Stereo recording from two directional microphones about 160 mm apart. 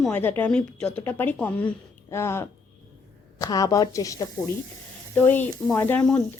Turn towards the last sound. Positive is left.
turn(degrees=10)  # may be behind; listen again after turning